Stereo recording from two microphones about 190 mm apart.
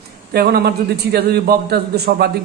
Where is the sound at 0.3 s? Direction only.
55° right (ahead or behind).